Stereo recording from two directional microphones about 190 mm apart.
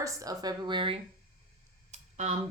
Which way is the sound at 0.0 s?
20° right (ahead or behind).